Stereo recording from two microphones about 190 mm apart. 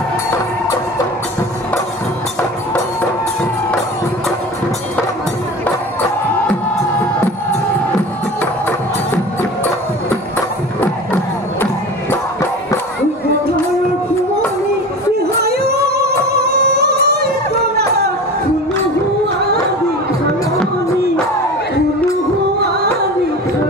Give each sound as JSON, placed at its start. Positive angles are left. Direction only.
{"t": 11.6, "sound": "music", "side_deg": 10}
{"t": 15.4, "sound": "music", "side_deg": -55}